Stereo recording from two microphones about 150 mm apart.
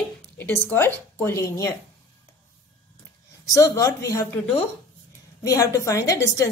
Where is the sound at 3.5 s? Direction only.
20° left (ahead or behind).